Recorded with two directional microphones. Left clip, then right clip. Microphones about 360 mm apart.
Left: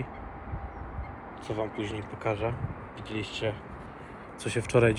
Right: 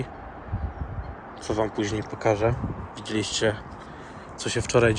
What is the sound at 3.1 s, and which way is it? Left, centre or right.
Speech, centre.